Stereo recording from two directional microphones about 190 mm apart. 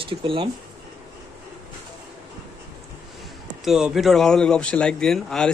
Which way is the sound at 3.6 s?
Centre (ahead or behind).